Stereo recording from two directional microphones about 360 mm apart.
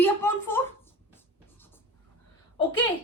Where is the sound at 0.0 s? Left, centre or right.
Centre.